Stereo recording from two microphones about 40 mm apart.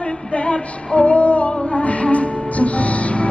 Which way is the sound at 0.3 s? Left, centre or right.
Left.